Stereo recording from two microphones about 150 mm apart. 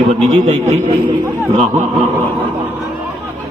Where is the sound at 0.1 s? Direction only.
50° right (ahead or behind).